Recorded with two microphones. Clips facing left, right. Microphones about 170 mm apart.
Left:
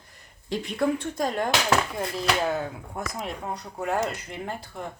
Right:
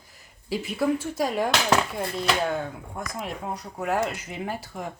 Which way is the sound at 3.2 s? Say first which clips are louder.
Even; 5° right (ahead or behind).